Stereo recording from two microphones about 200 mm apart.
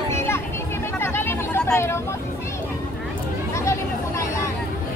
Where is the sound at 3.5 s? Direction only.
15° left (ahead or behind).